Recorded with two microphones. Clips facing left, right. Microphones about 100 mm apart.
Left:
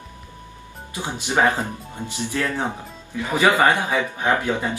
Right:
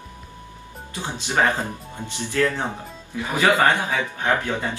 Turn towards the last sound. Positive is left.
turn(degrees=15)  # may be behind; listen again after turning